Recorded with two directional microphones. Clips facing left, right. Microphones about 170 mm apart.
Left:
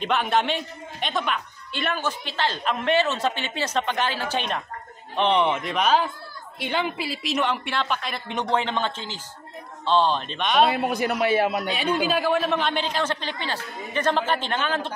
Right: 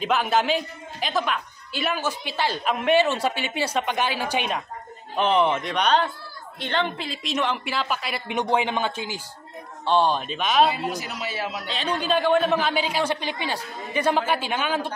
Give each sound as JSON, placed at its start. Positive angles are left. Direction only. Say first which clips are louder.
{"t": 0.0, "sound": "a man's voice", "louder": "right 1 dB", "side_deg": 0}
{"t": 10.7, "sound": "a man's voice", "louder": "left 5 dB", "side_deg": 55}
{"t": 11.7, "sound": "a man's voice", "louder": "left 1 dB", "side_deg": 10}